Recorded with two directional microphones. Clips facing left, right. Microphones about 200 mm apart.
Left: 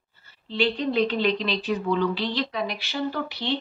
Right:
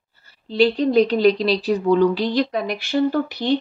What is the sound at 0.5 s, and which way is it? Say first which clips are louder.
A woman's voice: right 7 dB; 40° right (ahead or behind).